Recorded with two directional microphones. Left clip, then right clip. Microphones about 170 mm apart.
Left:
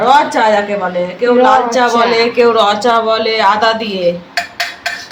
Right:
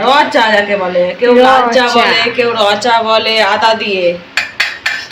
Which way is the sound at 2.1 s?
75° left (ahead or behind).